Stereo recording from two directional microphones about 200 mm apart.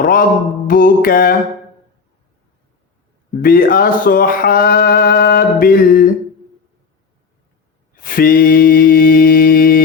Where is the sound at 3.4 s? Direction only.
45° left (ahead or behind).